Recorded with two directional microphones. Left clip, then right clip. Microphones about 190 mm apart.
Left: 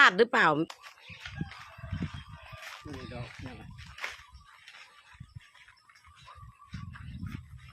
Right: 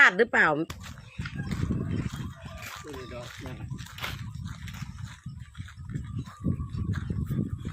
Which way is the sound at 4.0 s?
45° right (ahead or behind).